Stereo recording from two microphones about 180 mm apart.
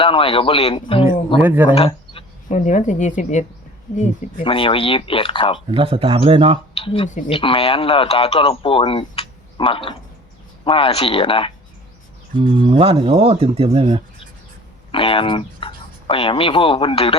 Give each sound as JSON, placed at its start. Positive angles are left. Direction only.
{"t": 0.0, "sound": "speech", "side_deg": 30}
{"t": 1.4, "sound": "speech", "side_deg": -10}
{"t": 1.7, "sound": "speech", "side_deg": 35}
{"t": 4.4, "sound": "speech", "side_deg": 30}
{"t": 5.7, "sound": "speech", "side_deg": -30}
{"t": 6.7, "sound": "speech", "side_deg": 30}
{"t": 12.4, "sound": "speech", "side_deg": -30}
{"t": 14.9, "sound": "speech", "side_deg": 30}